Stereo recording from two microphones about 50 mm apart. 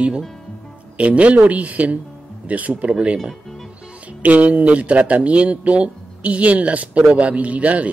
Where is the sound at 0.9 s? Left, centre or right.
Right.